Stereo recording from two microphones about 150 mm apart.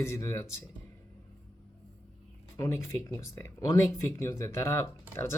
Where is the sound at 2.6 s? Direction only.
20° left (ahead or behind).